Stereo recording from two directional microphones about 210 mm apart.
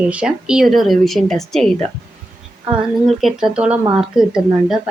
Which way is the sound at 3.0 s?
Centre (ahead or behind).